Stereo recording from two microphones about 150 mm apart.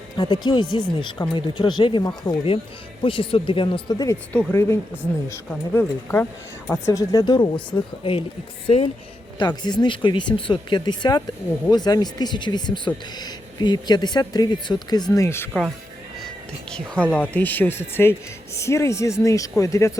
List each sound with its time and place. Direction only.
0.2 s speech: 30° left (ahead or behind)
4.3 s speech: 10° left (ahead or behind); by 8.9 s 40° left (ahead or behind)
9.4 s speech: 30° left (ahead or behind)
16.7 s speech: 5° left (ahead or behind)